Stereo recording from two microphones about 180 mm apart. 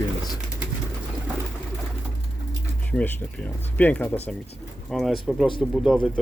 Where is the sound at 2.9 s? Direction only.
10° left (ahead or behind).